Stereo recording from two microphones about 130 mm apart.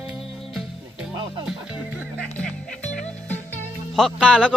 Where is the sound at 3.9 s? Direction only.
5° left (ahead or behind).